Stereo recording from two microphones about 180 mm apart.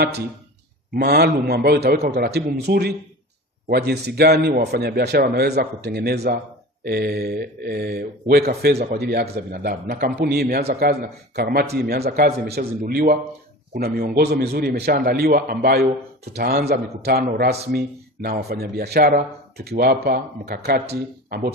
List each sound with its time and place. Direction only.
0.9 s speech: 60° right (ahead or behind)